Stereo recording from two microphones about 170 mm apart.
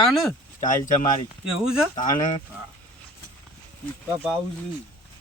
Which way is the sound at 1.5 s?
5° right (ahead or behind).